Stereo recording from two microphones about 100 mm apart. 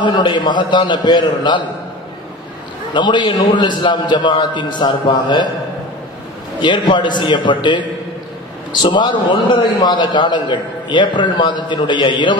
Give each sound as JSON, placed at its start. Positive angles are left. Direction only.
{"t": 0.0, "sound": "a man's voice", "side_deg": 50}
{"t": 2.9, "sound": "a man's voice", "side_deg": 50}
{"t": 6.6, "sound": "a man's voice", "side_deg": 50}
{"t": 8.8, "sound": "a man's voice", "side_deg": 50}